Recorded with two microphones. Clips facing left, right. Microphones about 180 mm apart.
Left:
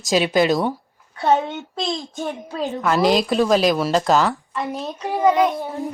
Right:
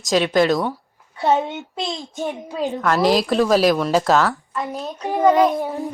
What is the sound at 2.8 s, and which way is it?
Speech, centre (ahead or behind).